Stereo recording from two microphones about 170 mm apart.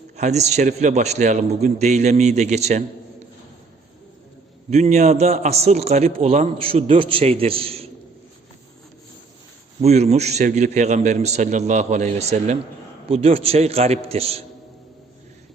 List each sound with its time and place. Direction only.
0.2 s a man's voice: 40° right (ahead or behind)
4.7 s a man's voice: 40° right (ahead or behind)
9.8 s a man's voice: 40° right (ahead or behind)